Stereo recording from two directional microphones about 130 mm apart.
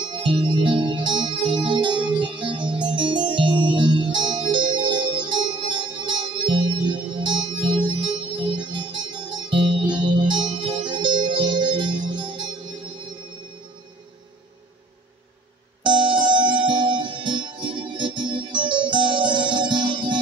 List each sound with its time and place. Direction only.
0.0 s music: 40° right (ahead or behind)
15.8 s music: 40° right (ahead or behind)